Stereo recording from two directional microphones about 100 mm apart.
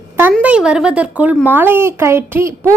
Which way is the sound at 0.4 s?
10° right (ahead or behind).